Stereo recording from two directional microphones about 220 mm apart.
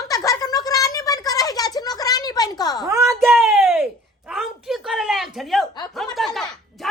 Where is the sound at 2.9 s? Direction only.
15° right (ahead or behind).